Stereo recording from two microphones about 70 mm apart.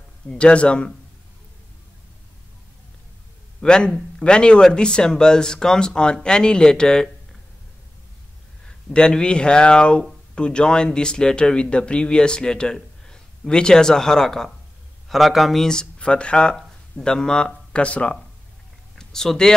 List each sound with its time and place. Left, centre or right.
0.3 s speech: centre
3.6 s speech: centre
8.6 s speech: centre